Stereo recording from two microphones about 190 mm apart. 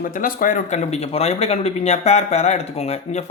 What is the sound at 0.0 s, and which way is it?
Speech, 45° left (ahead or behind).